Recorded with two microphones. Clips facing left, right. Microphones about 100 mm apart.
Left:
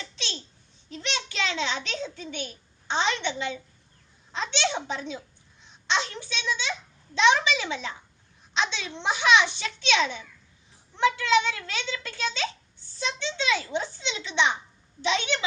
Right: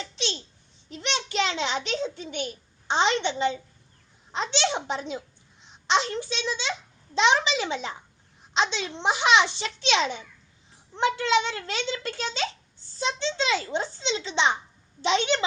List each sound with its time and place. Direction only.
0.9 s a child's voice: 25° right (ahead or behind)